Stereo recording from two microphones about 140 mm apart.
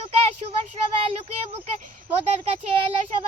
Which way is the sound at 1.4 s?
50° right (ahead or behind).